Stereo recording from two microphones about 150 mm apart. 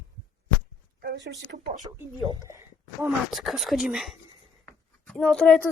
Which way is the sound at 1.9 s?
25° right (ahead or behind).